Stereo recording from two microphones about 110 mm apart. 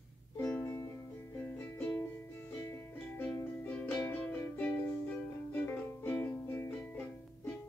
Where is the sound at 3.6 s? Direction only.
15° left (ahead or behind).